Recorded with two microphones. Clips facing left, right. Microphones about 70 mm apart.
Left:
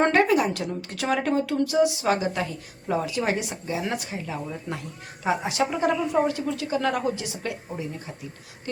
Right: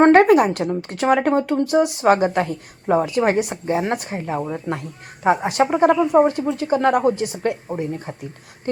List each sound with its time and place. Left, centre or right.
0.0 s a woman's voice: right